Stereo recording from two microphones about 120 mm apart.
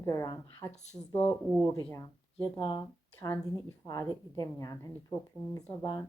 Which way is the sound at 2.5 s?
45° left (ahead or behind).